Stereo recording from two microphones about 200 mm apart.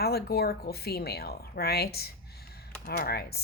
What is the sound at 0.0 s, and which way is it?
Speech, 50° left (ahead or behind).